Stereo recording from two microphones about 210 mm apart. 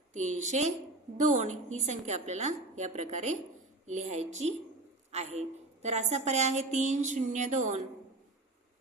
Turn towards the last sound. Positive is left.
turn(degrees=-35)  # may be behind; listen again after turning